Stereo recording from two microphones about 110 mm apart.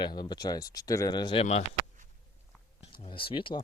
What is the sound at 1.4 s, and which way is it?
Speech, 80° left.